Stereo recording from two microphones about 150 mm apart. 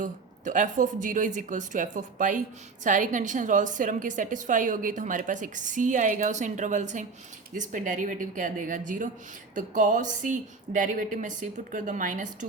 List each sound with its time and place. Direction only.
0.0 s a woman's voice: 60° right (ahead or behind)